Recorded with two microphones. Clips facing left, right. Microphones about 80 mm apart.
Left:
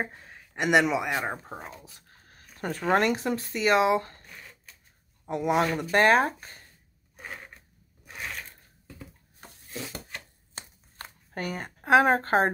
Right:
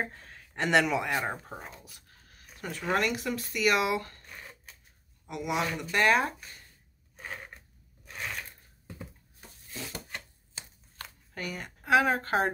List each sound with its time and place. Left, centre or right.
0.0 s speech: centre
1.9 s speech: left
5.2 s a woman's voice: left
8.0 s a sound: centre
11.3 s a woman's voice: left